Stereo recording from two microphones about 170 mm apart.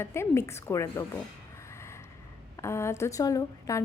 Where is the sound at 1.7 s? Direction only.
15° left (ahead or behind).